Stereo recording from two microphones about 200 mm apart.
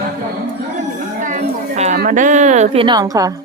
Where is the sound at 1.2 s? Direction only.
40° right (ahead or behind).